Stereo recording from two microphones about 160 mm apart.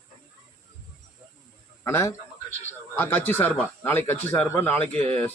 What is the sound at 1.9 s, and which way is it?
Speech, 15° left (ahead or behind).